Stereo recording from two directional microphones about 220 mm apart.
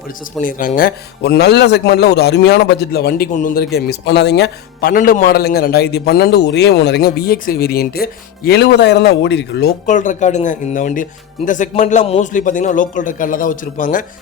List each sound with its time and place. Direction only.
0.3 s a man's voice: 35° left (ahead or behind)